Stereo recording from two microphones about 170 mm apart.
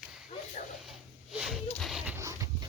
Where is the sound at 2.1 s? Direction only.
20° right (ahead or behind).